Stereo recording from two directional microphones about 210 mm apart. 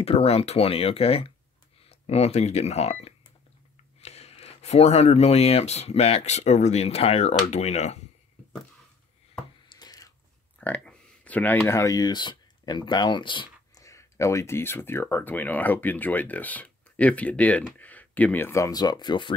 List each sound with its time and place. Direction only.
0.0 s speech: 30° left (ahead or behind)
9.7 s a sound: 20° left (ahead or behind)
10.6 s speech: 5° left (ahead or behind)